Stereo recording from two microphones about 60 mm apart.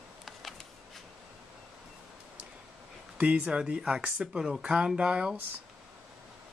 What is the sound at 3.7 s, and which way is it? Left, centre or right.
Speech, centre.